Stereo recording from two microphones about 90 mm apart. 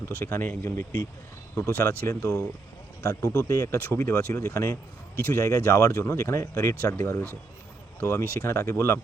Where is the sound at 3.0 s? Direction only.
40° left (ahead or behind).